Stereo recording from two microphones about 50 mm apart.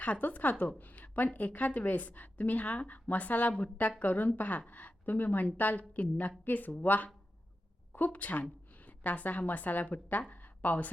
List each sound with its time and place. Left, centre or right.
0.0 s a woman's voice: left